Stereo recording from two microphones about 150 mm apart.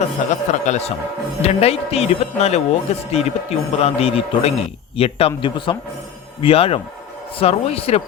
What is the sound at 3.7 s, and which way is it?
A man's voice, 40° left (ahead or behind).